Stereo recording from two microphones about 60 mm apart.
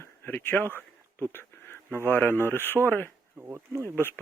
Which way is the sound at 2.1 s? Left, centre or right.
Left.